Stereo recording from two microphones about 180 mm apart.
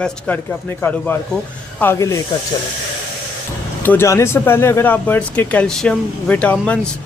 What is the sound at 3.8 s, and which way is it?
Speech, 10° left (ahead or behind).